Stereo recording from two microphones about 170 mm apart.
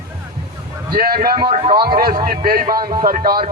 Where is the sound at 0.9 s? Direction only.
60° right (ahead or behind).